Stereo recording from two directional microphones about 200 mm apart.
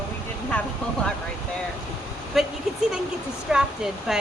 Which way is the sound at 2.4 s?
Centre (ahead or behind).